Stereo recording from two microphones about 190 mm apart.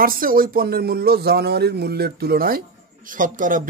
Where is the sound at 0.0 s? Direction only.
50° right (ahead or behind).